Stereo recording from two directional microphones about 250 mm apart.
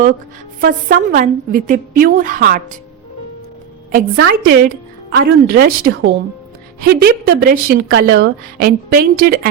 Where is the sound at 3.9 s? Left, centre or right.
Right.